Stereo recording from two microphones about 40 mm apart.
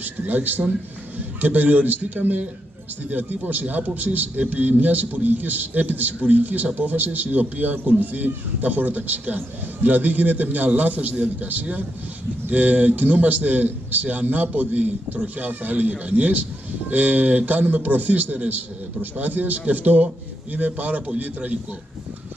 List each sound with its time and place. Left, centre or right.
0.0 s a man's voice: right